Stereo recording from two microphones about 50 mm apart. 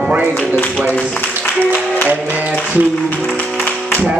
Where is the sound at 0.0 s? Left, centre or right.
Right.